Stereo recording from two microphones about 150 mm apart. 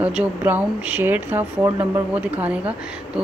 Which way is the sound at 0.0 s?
10° right (ahead or behind).